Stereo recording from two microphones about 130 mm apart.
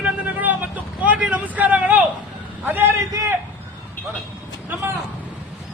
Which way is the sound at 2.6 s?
15° right (ahead or behind).